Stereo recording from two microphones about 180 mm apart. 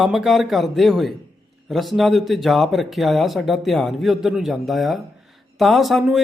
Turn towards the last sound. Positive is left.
turn(degrees=0)  # may be behind; listen again after turning